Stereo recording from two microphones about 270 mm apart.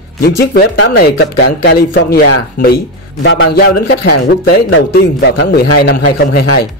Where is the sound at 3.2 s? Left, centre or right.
Left.